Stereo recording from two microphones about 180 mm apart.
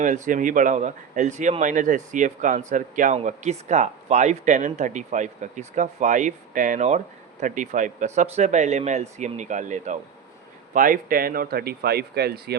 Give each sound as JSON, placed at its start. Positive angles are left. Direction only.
{"t": 0.0, "sound": "speech", "side_deg": -45}